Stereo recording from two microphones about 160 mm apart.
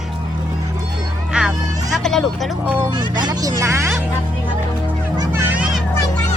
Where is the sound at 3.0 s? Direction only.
25° right (ahead or behind).